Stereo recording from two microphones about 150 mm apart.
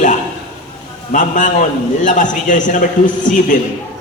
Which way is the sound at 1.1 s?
60° left (ahead or behind).